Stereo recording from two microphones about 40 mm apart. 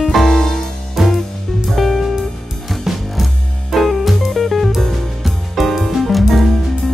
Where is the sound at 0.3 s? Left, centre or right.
Centre.